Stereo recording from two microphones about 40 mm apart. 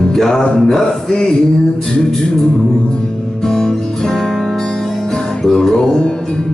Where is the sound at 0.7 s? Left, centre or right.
Centre.